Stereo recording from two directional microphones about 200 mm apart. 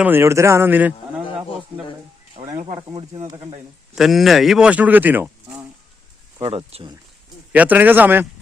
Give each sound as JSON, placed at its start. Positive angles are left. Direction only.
{"t": 0.0, "sound": "speech", "side_deg": -10}
{"t": 2.3, "sound": "sizzle", "side_deg": -15}
{"t": 2.9, "sound": "speech", "side_deg": -30}
{"t": 3.9, "sound": "speech", "side_deg": 0}
{"t": 6.4, "sound": "speech", "side_deg": -30}
{"t": 7.5, "sound": "speech", "side_deg": -10}